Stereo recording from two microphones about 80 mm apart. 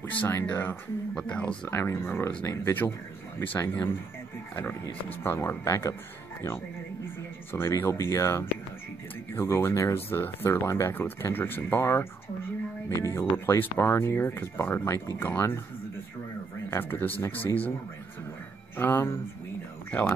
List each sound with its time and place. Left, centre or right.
0.0 s speech: left
1.1 s speech: centre
1.7 s speech: left
5.2 s speech: left
7.5 s speech: left
13.1 s speech: left
16.7 s speech: left
18.8 s speech: left